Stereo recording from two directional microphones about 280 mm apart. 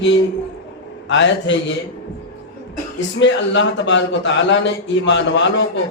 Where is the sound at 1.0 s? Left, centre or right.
Left.